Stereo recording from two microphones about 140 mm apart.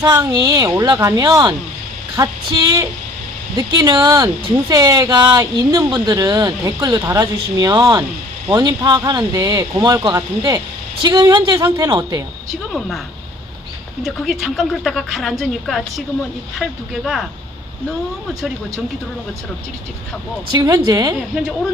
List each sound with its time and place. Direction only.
0.0 s speech: 25° right (ahead or behind)
14.0 s a woman's voice: centre (ahead or behind)
20.5 s speech: 30° right (ahead or behind)